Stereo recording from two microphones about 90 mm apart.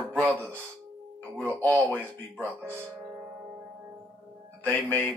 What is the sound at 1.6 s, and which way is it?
Speech, 20° left (ahead or behind).